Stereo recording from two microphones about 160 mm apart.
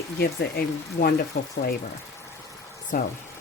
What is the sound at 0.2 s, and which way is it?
Speech, 80° left.